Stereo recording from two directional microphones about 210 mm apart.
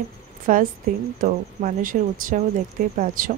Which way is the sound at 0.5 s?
40° right (ahead or behind).